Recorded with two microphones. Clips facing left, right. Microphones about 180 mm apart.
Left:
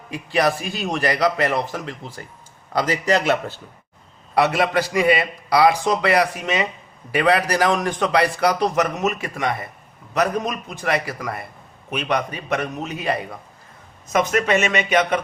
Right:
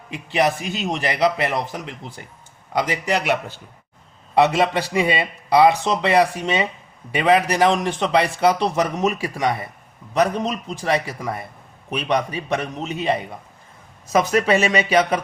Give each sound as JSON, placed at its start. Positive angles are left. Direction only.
{"t": 0.1, "sound": "a man's voice", "side_deg": -20}
{"t": 4.4, "sound": "a man's voice", "side_deg": -25}
{"t": 14.2, "sound": "speech", "side_deg": -35}